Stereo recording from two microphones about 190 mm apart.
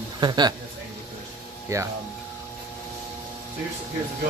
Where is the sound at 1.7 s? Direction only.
15° right (ahead or behind).